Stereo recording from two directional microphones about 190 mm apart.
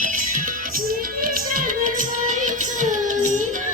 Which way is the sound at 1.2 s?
50° right (ahead or behind).